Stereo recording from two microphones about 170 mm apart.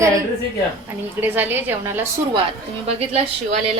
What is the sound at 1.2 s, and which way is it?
Speech, 10° right (ahead or behind).